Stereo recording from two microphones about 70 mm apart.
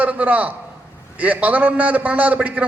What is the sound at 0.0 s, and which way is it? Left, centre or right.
A man's voice, right.